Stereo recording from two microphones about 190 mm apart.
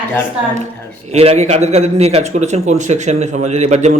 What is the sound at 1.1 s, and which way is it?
A man's voice, 35° right (ahead or behind).